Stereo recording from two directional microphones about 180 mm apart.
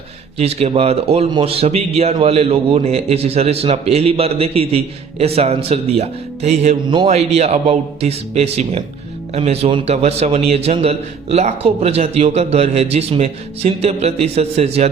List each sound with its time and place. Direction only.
0.3 s a man's voice: 35° right (ahead or behind)